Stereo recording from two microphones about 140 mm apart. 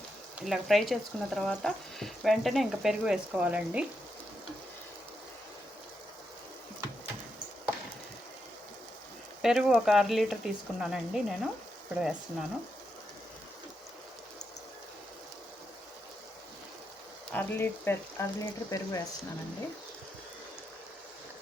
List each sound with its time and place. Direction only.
0.3 s speech: centre (ahead or behind)
9.4 s speech: 5° right (ahead or behind)
17.3 s speech: 15° left (ahead or behind)